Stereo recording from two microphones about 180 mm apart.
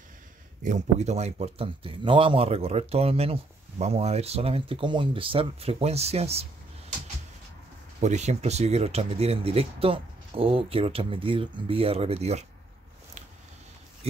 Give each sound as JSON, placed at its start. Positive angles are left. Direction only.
{"t": 0.7, "sound": "speech", "side_deg": -40}
{"t": 8.0, "sound": "speech", "side_deg": -40}